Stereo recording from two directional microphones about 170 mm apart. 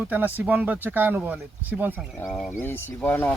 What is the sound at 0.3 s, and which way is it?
Speech, 10° right (ahead or behind).